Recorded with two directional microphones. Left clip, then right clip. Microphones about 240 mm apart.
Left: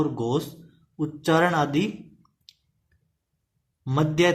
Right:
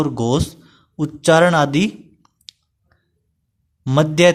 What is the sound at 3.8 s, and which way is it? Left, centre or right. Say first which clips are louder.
Speech: right 9 dB; right.